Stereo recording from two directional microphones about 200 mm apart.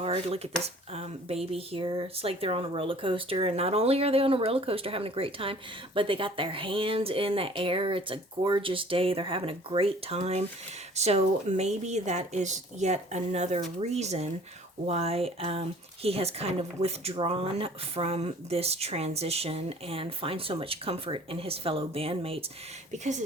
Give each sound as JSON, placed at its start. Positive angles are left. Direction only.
{"t": 0.0, "sound": "speech", "side_deg": -30}